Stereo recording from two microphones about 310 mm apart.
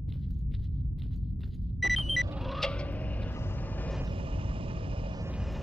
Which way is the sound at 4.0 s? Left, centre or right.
Centre.